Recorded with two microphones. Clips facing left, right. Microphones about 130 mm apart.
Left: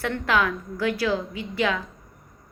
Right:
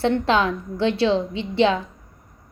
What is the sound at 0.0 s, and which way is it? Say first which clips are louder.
A woman's voice: right 5 dB; 25° right (ahead or behind).